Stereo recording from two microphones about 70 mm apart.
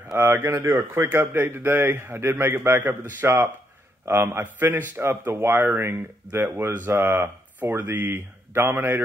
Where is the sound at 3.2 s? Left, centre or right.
Right.